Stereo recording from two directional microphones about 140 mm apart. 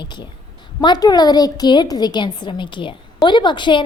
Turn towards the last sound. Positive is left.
turn(degrees=35)  # may be behind; listen again after turning